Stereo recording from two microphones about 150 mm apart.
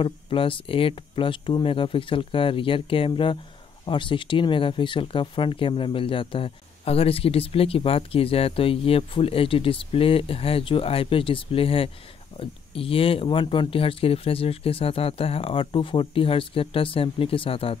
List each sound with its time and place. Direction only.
0.0 s speech: 35° left (ahead or behind)